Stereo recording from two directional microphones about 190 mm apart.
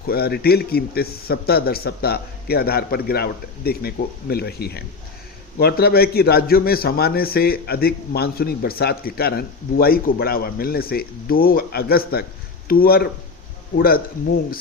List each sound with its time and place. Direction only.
0.1 s a man's voice: 55° left (ahead or behind)